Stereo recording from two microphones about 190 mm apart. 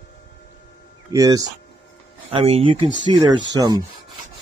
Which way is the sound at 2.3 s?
30° right (ahead or behind).